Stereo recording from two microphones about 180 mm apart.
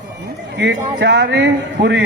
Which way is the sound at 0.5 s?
75° right (ahead or behind).